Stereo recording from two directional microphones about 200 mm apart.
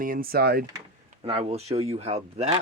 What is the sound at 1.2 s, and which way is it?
Speech, 30° right (ahead or behind).